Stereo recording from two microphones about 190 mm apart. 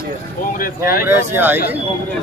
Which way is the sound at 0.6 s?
50° left (ahead or behind).